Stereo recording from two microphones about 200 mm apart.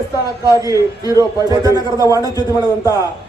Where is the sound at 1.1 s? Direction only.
15° right (ahead or behind).